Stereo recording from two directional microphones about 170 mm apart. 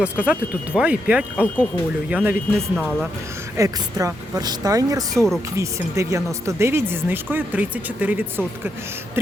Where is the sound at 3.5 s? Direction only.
20° right (ahead or behind).